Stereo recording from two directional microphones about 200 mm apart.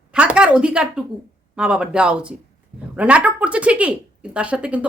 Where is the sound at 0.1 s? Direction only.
5° right (ahead or behind).